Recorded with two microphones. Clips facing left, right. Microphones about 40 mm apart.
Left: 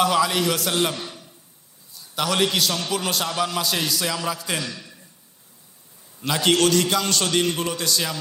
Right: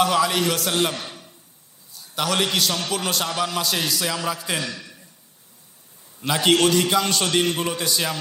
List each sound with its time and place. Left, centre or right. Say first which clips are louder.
0.0 s a man's voice: even; centre
0.9 s a sound: even; right
2.1 s a man's voice: even; centre
4.6 s a man's voice: right 2 dB; right
6.1 s a man's voice: right 1 dB; centre